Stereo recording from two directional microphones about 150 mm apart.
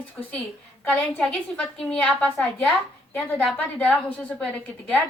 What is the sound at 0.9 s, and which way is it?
A woman's voice, 5° left (ahead or behind).